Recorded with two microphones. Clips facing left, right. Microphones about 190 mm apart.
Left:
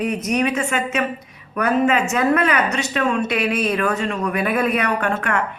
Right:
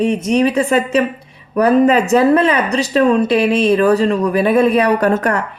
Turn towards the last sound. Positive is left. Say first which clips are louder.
# right 7 dB
turn(degrees=-40)  # may be behind; listen again after turning